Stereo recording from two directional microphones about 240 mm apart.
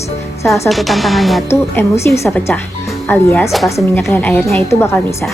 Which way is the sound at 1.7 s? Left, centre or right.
Centre.